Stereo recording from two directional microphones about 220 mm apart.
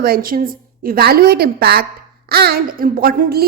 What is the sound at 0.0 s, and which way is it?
A woman's voice, 40° right (ahead or behind).